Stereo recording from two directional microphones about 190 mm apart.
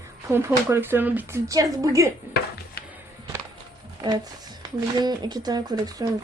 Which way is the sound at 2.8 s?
55° left (ahead or behind).